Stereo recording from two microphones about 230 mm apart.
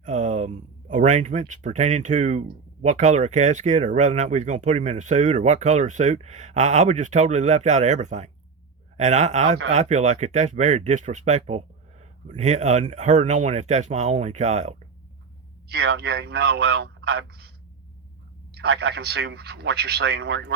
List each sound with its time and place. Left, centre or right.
0.0 s speech: right
15.7 s speech: right
18.5 s speech: right